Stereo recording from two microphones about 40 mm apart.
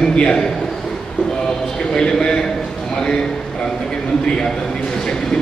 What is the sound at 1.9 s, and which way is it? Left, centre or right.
Speech, centre.